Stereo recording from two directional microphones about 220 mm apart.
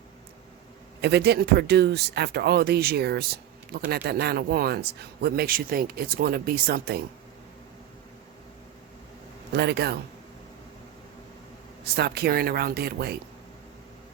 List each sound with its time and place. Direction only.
1.0 s speech: 50° right (ahead or behind)
9.5 s speech: 50° right (ahead or behind)
11.9 s speech: 45° right (ahead or behind)